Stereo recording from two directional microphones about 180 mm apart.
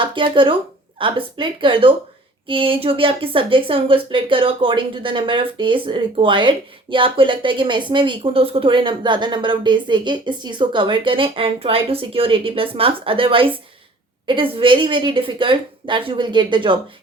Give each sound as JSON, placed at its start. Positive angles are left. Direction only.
{"t": 0.0, "sound": "speech", "side_deg": -25}